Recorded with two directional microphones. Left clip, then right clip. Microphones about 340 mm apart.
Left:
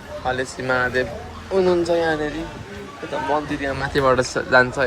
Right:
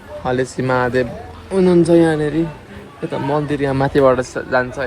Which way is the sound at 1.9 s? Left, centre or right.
Centre.